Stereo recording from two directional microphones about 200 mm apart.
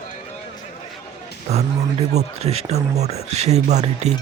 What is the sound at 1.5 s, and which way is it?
Speech, 30° right (ahead or behind).